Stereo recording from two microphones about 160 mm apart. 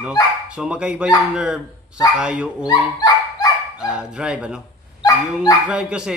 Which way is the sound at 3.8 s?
5° right (ahead or behind).